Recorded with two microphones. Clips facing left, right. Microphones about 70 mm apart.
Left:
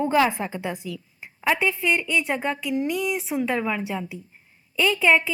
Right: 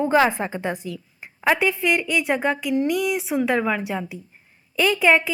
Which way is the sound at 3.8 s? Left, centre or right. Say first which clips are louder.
Right 2 dB; centre.